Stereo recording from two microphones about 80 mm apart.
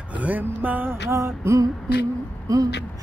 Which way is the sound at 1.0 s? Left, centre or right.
Right.